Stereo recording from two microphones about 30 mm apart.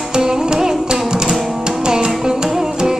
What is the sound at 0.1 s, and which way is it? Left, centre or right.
Music, right.